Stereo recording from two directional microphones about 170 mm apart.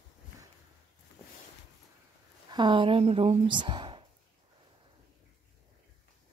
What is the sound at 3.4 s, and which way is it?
Speech, 25° right (ahead or behind).